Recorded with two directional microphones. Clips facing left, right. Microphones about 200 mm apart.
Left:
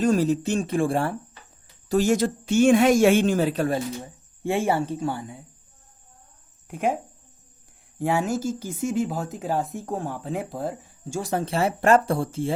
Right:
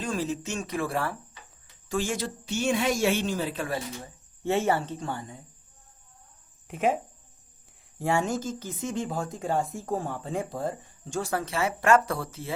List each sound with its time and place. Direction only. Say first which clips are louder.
0.0 s speech: left 9 dB; 40° left (ahead or behind)
1.9 s speech: left 9 dB; 40° left (ahead or behind)
4.0 s speech: left 2 dB; 15° left (ahead or behind)
6.7 s speech: left 1 dB; centre (ahead or behind)
7.9 s speech: left 3 dB; centre (ahead or behind)
11.4 s speech: left 4 dB; 30° left (ahead or behind)